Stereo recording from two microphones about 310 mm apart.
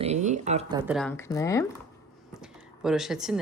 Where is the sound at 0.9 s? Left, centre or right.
Centre.